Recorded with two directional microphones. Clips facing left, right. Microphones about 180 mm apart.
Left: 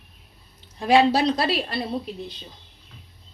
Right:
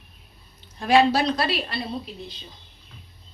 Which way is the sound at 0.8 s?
30° left (ahead or behind).